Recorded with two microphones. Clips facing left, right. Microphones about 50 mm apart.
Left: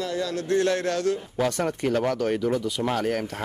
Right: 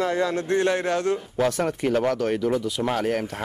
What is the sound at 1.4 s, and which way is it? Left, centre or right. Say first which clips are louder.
Speech: right 2 dB; centre.